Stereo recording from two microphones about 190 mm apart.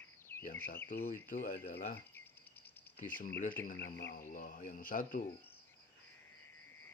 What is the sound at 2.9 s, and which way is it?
Speech, 45° left (ahead or behind).